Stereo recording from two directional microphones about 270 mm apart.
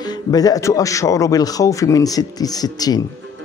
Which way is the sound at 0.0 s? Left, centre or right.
Centre.